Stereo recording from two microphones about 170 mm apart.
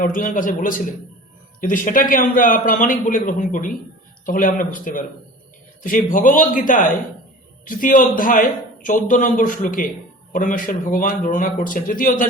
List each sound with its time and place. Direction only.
0.0 s a man's voice: 55° left (ahead or behind)